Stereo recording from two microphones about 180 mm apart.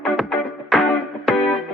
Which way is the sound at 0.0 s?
Centre (ahead or behind).